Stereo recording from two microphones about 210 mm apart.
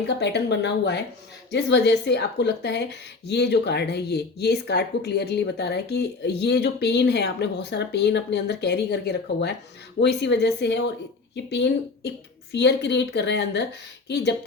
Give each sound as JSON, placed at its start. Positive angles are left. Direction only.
{"t": 0.2, "sound": "speech", "side_deg": 55}